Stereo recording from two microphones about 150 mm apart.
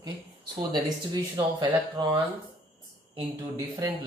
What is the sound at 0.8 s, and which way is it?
Speech, 30° right (ahead or behind).